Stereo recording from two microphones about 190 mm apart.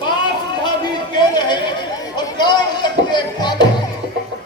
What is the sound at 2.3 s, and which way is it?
Music, 25° left (ahead or behind).